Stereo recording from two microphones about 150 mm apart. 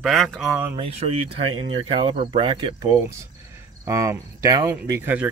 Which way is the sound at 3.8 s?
20° right (ahead or behind).